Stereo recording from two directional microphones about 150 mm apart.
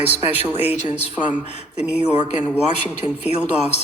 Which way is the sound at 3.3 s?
45° left (ahead or behind).